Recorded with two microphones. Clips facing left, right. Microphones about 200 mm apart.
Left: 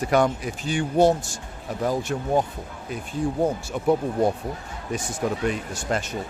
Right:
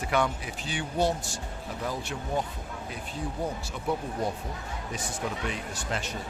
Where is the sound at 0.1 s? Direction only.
45° left (ahead or behind).